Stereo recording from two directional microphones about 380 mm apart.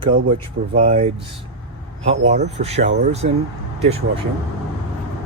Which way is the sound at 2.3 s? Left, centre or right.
Centre.